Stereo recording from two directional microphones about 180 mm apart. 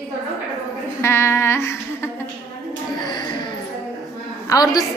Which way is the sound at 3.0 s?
25° left (ahead or behind).